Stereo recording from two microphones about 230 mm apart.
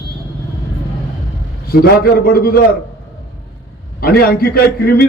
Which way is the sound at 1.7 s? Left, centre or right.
Left.